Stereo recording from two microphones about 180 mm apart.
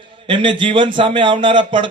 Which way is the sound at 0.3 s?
25° right (ahead or behind).